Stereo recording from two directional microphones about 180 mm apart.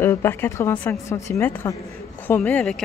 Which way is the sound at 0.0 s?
15° left (ahead or behind).